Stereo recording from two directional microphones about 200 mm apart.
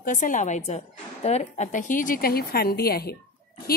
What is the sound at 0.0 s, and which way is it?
A woman's voice, 40° left (ahead or behind).